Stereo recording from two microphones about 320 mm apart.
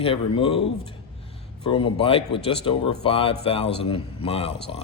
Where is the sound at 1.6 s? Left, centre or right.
Centre.